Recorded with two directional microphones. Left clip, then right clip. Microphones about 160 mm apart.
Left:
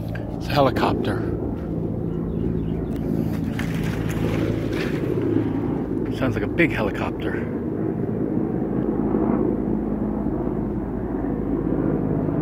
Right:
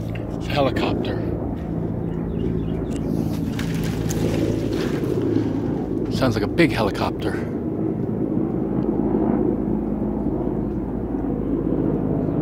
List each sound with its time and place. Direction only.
0.6 s speech: 35° left (ahead or behind)
6.2 s speech: 25° right (ahead or behind)